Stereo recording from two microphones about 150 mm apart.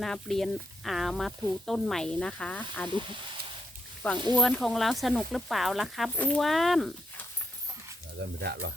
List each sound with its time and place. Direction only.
0.0 s speech: centre (ahead or behind)
4.0 s speech: 10° left (ahead or behind)